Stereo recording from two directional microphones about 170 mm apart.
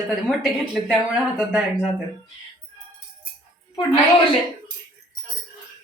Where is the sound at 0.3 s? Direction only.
Centre (ahead or behind).